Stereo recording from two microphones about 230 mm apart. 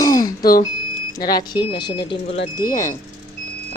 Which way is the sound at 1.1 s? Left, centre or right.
Centre.